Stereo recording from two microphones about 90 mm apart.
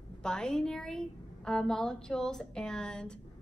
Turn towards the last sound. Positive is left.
turn(degrees=10)  # may be behind; listen again after turning